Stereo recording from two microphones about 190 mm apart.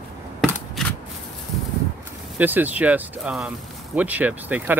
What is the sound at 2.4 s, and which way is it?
Speech, 10° right (ahead or behind).